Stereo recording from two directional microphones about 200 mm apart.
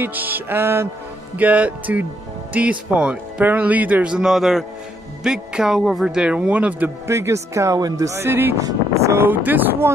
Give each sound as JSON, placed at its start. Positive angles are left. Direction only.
{"t": 0.0, "sound": "speech", "side_deg": -10}